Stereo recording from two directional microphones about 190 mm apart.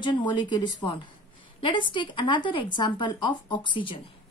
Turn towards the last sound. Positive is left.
turn(degrees=25)  # may be behind; listen again after turning